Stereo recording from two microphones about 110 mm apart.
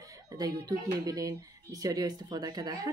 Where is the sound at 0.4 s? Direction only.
35° right (ahead or behind).